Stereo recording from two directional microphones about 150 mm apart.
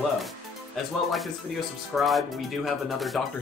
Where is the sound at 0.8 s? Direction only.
Centre (ahead or behind).